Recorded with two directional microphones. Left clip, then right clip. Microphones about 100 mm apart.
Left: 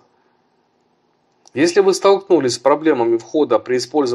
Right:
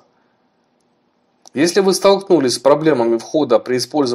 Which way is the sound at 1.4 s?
30° right (ahead or behind).